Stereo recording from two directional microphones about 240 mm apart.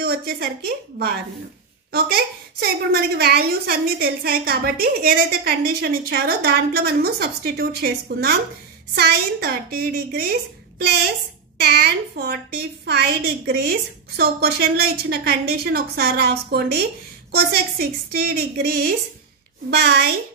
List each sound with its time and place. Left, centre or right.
0.0 s a woman's voice: right
11.6 s a woman's voice: right